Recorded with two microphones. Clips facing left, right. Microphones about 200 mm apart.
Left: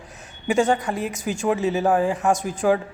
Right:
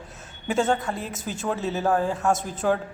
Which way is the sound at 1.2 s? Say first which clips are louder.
Left 6 dB; 10° left (ahead or behind).